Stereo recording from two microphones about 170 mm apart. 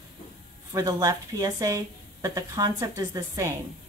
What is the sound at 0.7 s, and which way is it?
A woman's voice, 20° right (ahead or behind).